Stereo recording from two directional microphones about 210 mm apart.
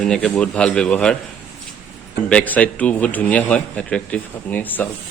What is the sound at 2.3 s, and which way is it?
A man's voice, 5° left (ahead or behind).